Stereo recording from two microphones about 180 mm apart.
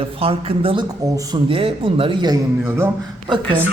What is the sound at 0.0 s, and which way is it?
Speech, 30° right (ahead or behind).